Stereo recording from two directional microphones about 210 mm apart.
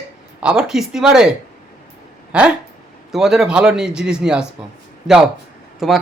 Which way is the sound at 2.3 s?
5° right (ahead or behind).